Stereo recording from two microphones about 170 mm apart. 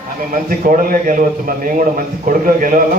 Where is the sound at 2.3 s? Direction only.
55° right (ahead or behind).